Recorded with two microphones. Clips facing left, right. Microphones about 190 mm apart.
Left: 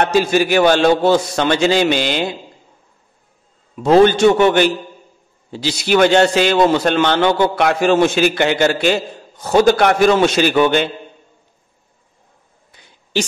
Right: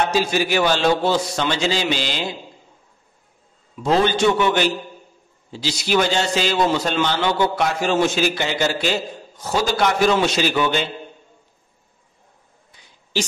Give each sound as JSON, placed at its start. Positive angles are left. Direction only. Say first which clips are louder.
{"t": 0.0, "sound": "a man's voice", "louder": "left 5 dB", "side_deg": 55}
{"t": 3.8, "sound": "a man's voice", "louder": "left 7 dB", "side_deg": 55}